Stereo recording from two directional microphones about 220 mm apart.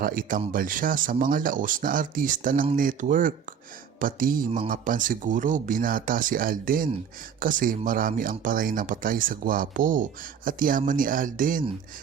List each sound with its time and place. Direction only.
0.0 s speech: 40° right (ahead or behind)